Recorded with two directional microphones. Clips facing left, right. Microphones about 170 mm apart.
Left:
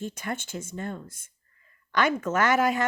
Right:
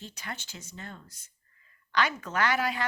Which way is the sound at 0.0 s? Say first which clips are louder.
Left 9 dB; 50° left (ahead or behind).